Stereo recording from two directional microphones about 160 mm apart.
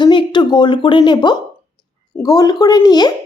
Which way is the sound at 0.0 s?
30° left (ahead or behind).